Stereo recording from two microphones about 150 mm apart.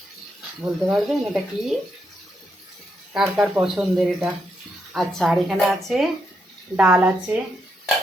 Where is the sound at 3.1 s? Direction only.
5° right (ahead or behind).